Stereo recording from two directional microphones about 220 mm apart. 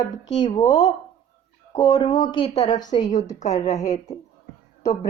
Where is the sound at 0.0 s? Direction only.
20° left (ahead or behind).